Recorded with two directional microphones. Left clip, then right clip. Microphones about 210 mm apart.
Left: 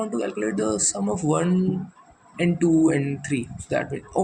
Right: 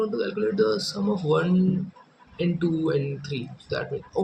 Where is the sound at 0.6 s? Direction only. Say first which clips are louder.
Left 1 dB; 25° left (ahead or behind).